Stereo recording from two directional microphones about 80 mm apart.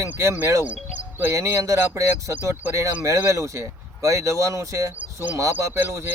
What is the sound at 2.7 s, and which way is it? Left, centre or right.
Speech, right.